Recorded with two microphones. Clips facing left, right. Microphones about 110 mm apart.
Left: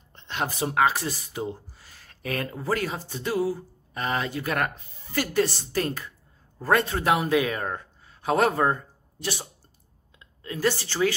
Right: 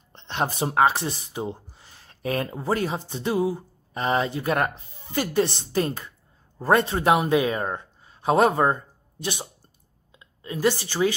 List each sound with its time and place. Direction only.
0.1 s a man's voice: 25° right (ahead or behind)